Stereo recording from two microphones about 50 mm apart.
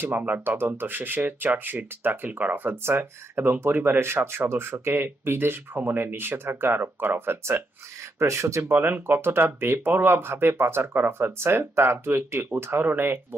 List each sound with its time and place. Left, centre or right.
0.0 s speech: right
8.2 s speech: right
8.8 s speech: right
12.8 s speech: right